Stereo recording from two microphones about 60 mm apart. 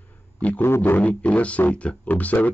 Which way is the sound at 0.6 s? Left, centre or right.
Left.